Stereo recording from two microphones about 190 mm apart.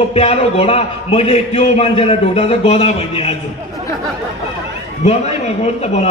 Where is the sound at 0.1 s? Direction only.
35° left (ahead or behind).